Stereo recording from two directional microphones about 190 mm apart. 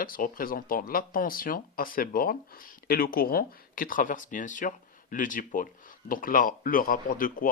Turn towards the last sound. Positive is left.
turn(degrees=50)  # may be behind; listen again after turning